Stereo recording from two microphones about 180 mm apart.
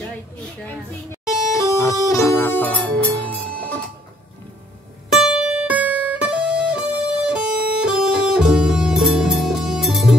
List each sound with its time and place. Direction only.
1.5 s music: 15° left (ahead or behind)
5.1 s music: 5° right (ahead or behind)